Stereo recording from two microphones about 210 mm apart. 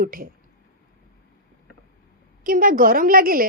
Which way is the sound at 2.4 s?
40° right (ahead or behind).